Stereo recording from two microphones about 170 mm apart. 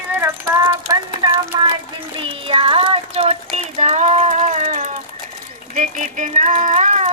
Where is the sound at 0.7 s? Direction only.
20° right (ahead or behind).